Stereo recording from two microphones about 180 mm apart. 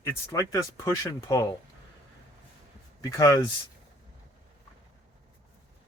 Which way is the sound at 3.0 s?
20° left (ahead or behind).